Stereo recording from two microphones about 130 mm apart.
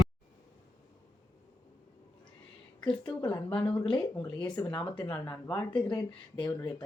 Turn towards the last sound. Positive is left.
turn(degrees=35)  # may be behind; listen again after turning